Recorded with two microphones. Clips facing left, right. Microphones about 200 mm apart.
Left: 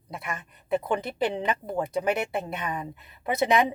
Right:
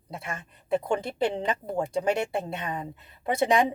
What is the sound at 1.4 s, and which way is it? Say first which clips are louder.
Speech: even; 30° right (ahead or behind).